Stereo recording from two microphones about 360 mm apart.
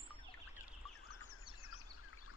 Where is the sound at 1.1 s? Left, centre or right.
Left.